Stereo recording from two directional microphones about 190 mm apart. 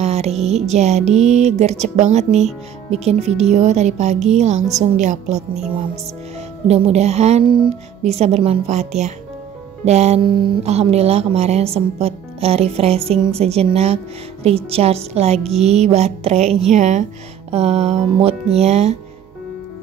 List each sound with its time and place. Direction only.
0.0 s music: 35° right (ahead or behind)
1.1 s speech: 35° right (ahead or behind)
6.7 s speech: 35° right (ahead or behind)